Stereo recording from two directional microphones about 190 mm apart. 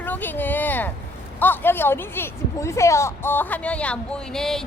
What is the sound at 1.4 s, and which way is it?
Speech, 10° left (ahead or behind).